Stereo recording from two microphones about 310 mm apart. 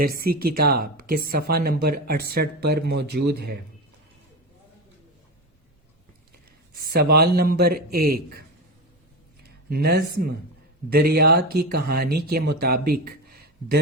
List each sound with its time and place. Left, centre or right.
0.4 s speech: right
6.9 s speech: right
9.4 s a sound: right
10.9 s speech: right